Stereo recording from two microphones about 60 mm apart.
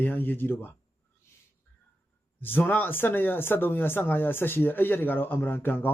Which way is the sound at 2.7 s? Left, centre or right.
Left.